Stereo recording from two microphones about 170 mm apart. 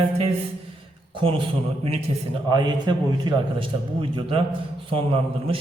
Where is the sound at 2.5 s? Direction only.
25° right (ahead or behind).